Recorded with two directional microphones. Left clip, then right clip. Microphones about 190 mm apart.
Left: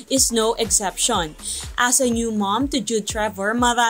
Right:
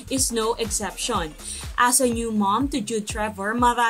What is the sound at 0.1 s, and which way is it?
Speech, 20° left (ahead or behind).